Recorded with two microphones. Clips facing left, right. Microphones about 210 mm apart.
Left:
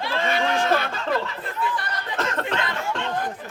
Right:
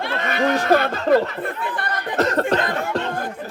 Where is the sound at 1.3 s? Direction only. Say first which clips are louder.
Right 2 dB; 55° right (ahead or behind).